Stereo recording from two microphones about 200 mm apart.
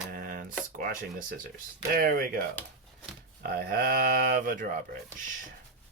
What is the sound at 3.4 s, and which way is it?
Speech, 50° right (ahead or behind).